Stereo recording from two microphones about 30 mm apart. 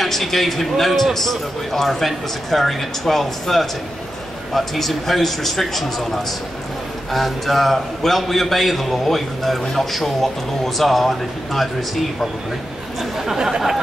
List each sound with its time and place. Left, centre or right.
0.0 s a man's voice: centre
13.2 s speech: centre